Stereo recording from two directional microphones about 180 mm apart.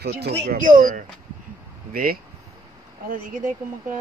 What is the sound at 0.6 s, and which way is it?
Speech, 50° right (ahead or behind).